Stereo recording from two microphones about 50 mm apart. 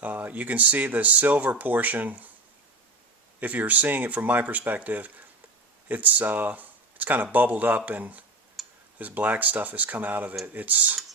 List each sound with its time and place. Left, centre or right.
0.0 s speech: right
3.4 s speech: right
8.6 s tick-tock: centre
9.0 s speech: right